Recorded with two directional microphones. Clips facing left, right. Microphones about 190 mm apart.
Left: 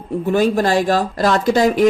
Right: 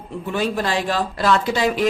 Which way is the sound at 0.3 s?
45° left (ahead or behind).